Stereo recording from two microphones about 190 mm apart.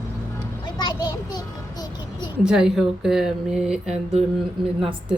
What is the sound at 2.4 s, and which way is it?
Speech, 5° right (ahead or behind).